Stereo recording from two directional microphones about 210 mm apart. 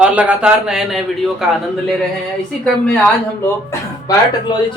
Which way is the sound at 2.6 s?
5° left (ahead or behind).